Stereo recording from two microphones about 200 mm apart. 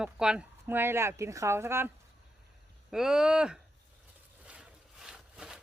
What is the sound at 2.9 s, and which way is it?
Speech, 5° right (ahead or behind).